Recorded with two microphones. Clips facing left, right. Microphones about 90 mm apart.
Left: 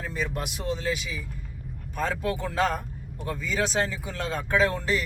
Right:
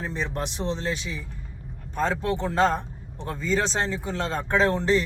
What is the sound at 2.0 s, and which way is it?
Speech, 30° right (ahead or behind).